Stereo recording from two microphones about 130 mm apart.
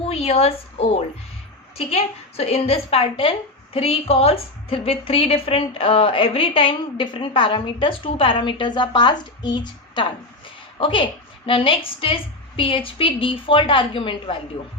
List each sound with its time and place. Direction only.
0.0 s a woman's voice: 50° left (ahead or behind)